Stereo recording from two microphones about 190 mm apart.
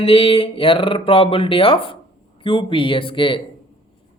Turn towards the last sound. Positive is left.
turn(degrees=25)  # may be behind; listen again after turning